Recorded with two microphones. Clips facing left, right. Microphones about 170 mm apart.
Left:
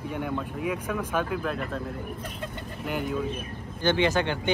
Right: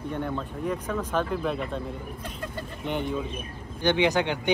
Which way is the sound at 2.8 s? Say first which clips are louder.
Right 1 dB; 5° left (ahead or behind).